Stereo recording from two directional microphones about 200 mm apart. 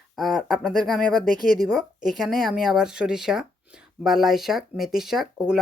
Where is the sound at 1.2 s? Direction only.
45° left (ahead or behind).